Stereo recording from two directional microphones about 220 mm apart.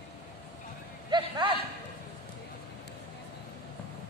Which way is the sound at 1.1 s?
20° right (ahead or behind).